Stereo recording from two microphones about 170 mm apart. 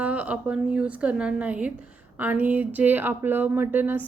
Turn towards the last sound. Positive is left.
turn(degrees=-10)  # may be behind; listen again after turning